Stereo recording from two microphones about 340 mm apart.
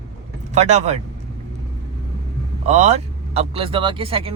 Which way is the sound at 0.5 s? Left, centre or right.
Centre.